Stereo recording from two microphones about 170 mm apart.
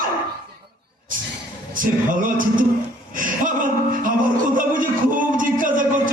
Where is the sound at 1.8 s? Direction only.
55° right (ahead or behind).